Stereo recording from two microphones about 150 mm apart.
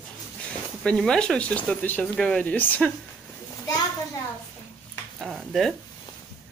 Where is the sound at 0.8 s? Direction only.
5° left (ahead or behind).